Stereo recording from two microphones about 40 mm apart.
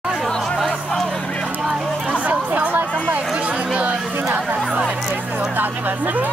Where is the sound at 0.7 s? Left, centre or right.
Centre.